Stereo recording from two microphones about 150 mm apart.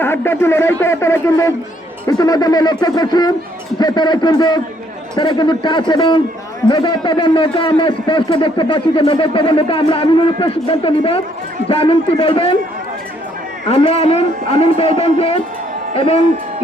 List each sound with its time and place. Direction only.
0.0 s a man's voice: 15° left (ahead or behind); by 12.5 s 40° left (ahead or behind)
13.7 s a man's voice: 45° left (ahead or behind)